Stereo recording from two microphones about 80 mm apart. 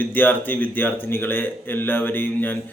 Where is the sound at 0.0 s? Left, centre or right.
Left.